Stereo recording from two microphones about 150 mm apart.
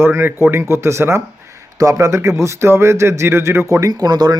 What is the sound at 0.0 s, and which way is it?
A man's voice, 15° right (ahead or behind).